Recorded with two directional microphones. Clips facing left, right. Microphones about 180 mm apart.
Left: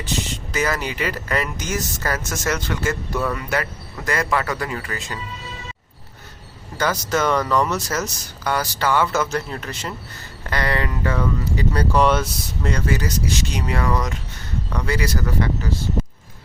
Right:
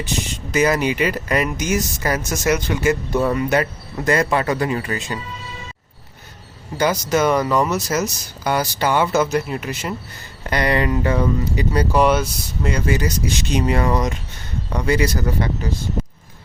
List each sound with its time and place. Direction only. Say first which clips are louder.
0.5 s speech: right 6 dB; 20° right (ahead or behind)
6.7 s speech: right 3 dB; 15° right (ahead or behind)
12.8 s speech: right 2 dB; 20° right (ahead or behind)